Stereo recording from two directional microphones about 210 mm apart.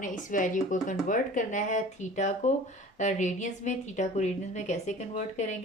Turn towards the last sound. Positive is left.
turn(degrees=35)  # may be behind; listen again after turning